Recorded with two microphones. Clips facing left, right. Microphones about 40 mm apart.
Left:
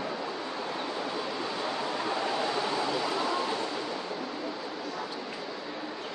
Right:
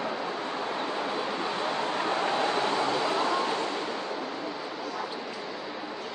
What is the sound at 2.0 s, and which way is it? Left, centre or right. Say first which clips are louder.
Vehicle: right 3 dB; right.